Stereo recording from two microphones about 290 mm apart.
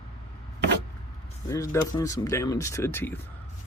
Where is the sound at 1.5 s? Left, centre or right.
Centre.